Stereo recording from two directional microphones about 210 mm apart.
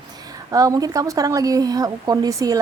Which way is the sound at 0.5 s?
15° right (ahead or behind).